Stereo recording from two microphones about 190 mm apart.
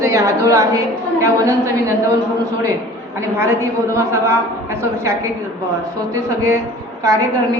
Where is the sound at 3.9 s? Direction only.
15° right (ahead or behind).